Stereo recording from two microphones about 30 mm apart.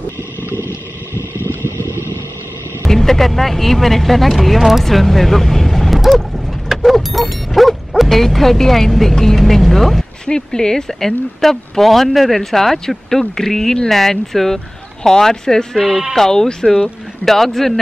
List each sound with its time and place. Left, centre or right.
2.9 s music: centre
3.3 s speech: centre
5.9 s dog: centre
8.1 s speech: centre
10.2 s speech: left
10.9 s speech: centre
15.9 s speech: centre
16.2 s speech: centre